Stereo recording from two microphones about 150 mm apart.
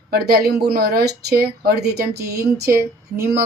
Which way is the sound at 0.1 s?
90° right.